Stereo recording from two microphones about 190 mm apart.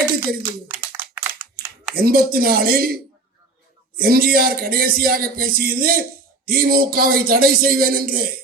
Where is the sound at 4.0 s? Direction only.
50° right (ahead or behind).